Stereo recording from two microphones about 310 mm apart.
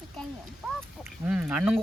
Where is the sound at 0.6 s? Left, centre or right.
Centre.